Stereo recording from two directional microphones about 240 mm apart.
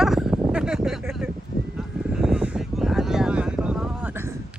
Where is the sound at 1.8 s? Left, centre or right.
Centre.